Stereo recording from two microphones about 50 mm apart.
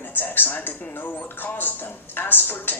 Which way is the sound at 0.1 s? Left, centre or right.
Left.